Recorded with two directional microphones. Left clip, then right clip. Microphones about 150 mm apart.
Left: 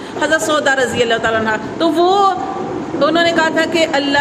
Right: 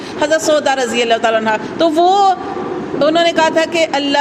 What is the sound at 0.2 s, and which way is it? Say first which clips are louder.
A woman's voice: right 2 dB; 40° right (ahead or behind).